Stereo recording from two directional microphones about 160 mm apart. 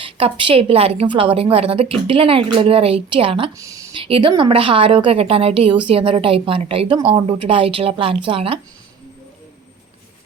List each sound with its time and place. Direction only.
0.0 s a woman's voice: 35° right (ahead or behind)
3.6 s speech: 20° right (ahead or behind)
3.9 s a woman's voice: 35° right (ahead or behind)